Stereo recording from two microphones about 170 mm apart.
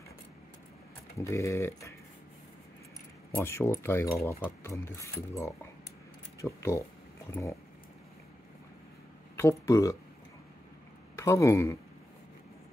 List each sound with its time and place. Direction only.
1.1 s speech: 15° left (ahead or behind)
3.3 s speech: 15° left (ahead or behind)
9.4 s speech: 20° left (ahead or behind)
11.1 s speech: 15° left (ahead or behind)